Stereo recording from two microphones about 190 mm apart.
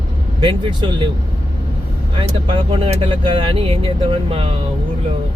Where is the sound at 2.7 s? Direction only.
30° right (ahead or behind).